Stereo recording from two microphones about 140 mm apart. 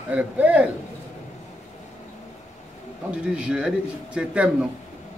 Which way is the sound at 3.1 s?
10° right (ahead or behind).